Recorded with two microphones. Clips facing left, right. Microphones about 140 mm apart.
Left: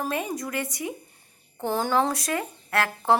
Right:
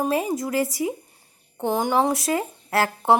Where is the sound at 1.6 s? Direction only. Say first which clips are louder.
Right 3 dB; 15° right (ahead or behind).